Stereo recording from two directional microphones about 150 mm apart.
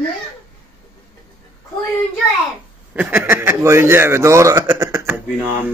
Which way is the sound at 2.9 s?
10° right (ahead or behind).